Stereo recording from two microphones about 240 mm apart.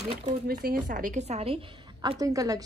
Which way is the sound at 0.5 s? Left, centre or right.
Right.